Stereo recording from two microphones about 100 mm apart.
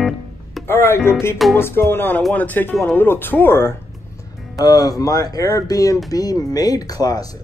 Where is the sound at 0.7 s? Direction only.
20° left (ahead or behind).